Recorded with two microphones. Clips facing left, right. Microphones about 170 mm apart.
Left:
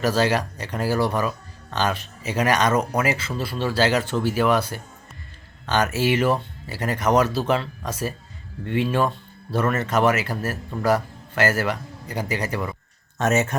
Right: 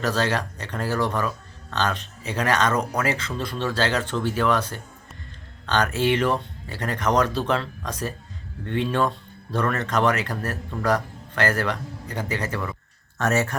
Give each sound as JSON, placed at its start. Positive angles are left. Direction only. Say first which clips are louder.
{"t": 0.0, "sound": "speech", "louder": "left 3 dB", "side_deg": 10}